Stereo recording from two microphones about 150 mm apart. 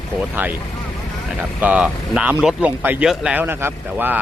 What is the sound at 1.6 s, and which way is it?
Speech, 5° right (ahead or behind).